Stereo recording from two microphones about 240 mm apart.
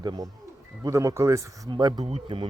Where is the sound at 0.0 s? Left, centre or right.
Centre.